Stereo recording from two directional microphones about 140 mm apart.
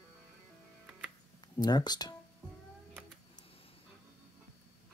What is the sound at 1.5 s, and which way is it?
Speech, 30° left (ahead or behind).